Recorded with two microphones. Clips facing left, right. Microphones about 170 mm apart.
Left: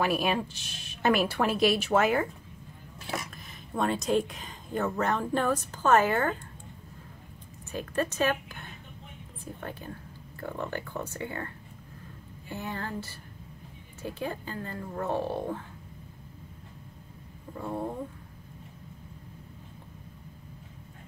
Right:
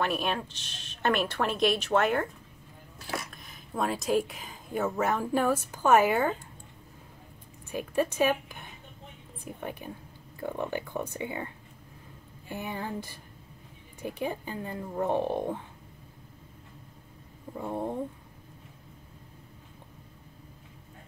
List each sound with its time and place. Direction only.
0.0 s a woman's voice: 5° left (ahead or behind)
3.3 s speech: centre (ahead or behind)
7.7 s speech: 10° right (ahead or behind)
12.5 s speech: 15° right (ahead or behind)
17.6 s speech: 20° right (ahead or behind)